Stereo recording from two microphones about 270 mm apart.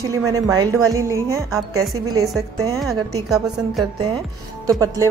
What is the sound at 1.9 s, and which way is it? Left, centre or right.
Speech, right.